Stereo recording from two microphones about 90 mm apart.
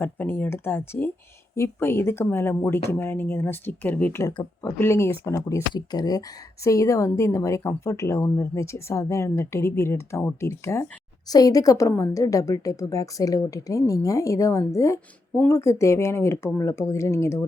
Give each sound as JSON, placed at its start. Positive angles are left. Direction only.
{"t": 0.0, "sound": "speech", "side_deg": 20}
{"t": 4.6, "sound": "a woman's voice", "side_deg": 30}
{"t": 5.7, "sound": "a woman's voice", "side_deg": 45}
{"t": 11.3, "sound": "a woman's voice", "side_deg": 40}